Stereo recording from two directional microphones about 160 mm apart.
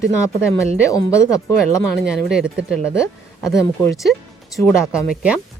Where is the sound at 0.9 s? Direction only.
20° left (ahead or behind).